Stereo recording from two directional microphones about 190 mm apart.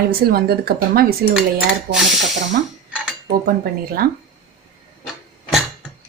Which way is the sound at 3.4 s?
50° right (ahead or behind).